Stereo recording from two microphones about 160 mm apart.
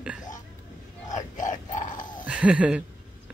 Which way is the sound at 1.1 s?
50° left (ahead or behind).